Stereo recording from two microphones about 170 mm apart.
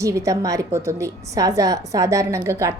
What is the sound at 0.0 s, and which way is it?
A woman's voice, 20° right (ahead or behind).